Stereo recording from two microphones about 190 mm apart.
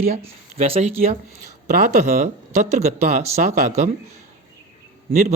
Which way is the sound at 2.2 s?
40° right (ahead or behind).